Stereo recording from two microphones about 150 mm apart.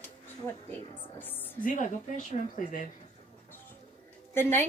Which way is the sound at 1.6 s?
55° left (ahead or behind).